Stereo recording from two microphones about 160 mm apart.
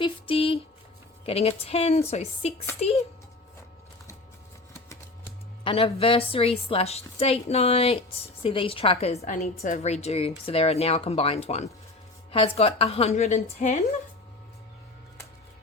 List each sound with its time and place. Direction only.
0.0 s a woman's voice: 35° left (ahead or behind)
5.6 s a woman's voice: 35° left (ahead or behind)